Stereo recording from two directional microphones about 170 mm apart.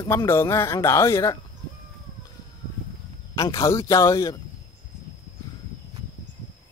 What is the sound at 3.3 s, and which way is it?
Speech, 20° left (ahead or behind).